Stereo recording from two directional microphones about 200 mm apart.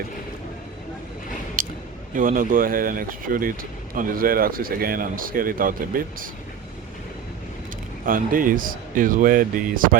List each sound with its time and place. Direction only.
1.6 s a sound: 45° right (ahead or behind)
2.1 s speech: 45° right (ahead or behind)
8.0 s speech: 45° right (ahead or behind)